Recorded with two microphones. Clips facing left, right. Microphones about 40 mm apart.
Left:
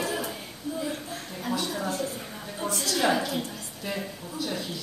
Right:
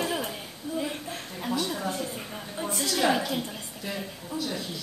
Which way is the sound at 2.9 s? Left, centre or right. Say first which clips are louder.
Even; centre.